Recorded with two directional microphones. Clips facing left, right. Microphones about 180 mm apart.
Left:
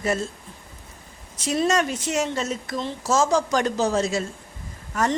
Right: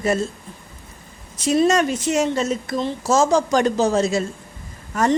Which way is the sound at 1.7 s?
20° right (ahead or behind).